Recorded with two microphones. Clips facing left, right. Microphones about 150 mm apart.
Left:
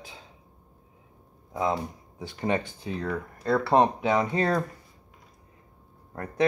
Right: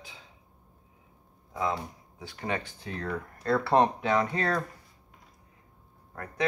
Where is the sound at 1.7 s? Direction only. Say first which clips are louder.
Left 4 dB; 25° left (ahead or behind).